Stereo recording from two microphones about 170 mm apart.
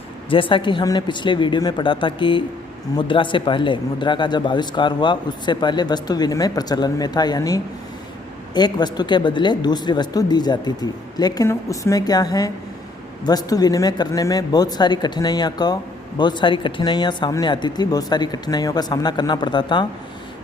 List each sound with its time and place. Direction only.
0.3 s speech: 30° left (ahead or behind)